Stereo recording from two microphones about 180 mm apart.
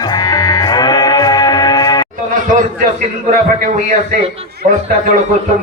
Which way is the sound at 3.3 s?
50° right (ahead or behind).